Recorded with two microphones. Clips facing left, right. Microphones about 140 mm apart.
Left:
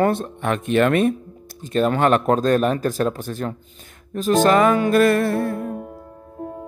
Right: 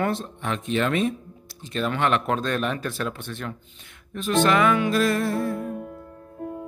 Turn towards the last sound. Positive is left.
turn(degrees=60)  # may be behind; listen again after turning